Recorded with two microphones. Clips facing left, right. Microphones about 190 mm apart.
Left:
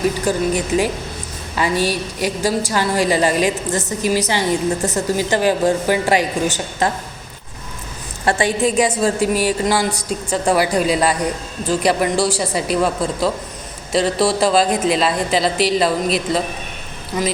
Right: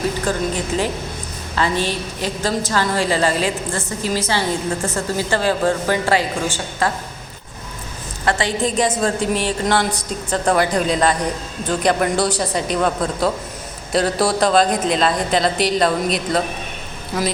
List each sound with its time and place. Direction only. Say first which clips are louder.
0.3 s a woman's voice: left 3 dB; 10° left (ahead or behind)
8.4 s a woman's voice: left 4 dB; 10° left (ahead or behind)